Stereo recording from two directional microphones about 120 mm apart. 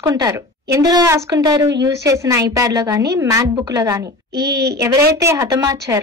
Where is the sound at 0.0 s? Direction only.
30° right (ahead or behind).